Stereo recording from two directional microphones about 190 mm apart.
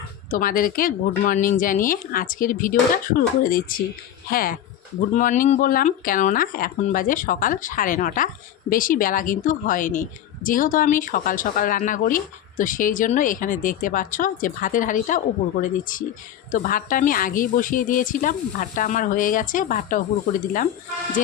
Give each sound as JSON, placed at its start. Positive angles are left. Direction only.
{"t": 0.3, "sound": "a woman's voice", "side_deg": 45}